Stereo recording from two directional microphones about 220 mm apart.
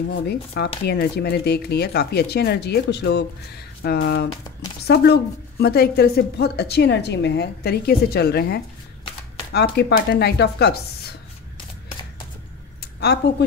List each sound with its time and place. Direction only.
0.1 s a woman's voice: 50° left (ahead or behind)
12.8 s speech: 50° left (ahead or behind)